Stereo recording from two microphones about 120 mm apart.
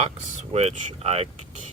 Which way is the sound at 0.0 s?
60° right (ahead or behind).